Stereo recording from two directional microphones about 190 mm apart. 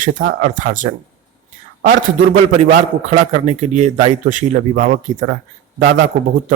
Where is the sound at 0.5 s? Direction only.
40° right (ahead or behind).